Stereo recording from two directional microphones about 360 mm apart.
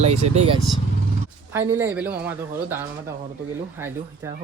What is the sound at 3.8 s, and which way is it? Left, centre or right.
Speech, centre.